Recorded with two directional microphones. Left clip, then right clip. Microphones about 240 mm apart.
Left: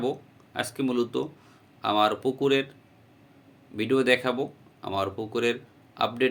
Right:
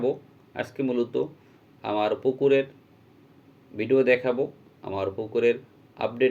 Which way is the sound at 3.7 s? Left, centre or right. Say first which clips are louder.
Right 2 dB; centre.